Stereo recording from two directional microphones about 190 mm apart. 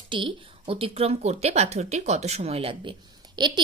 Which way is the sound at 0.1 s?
30° right (ahead or behind).